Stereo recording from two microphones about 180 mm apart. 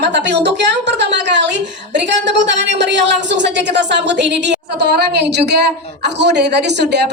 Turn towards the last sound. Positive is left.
turn(degrees=-70)  # may be behind; listen again after turning